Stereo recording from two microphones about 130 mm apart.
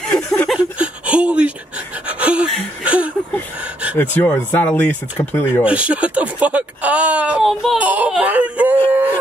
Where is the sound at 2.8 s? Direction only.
10° right (ahead or behind).